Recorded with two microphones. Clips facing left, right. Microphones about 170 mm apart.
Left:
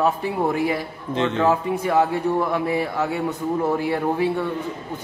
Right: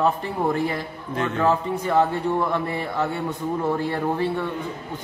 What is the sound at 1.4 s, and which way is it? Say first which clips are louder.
A man's voice: even; 10° left (ahead or behind).